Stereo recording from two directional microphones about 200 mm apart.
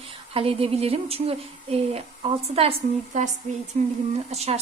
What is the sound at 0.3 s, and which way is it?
Speech, 30° right (ahead or behind).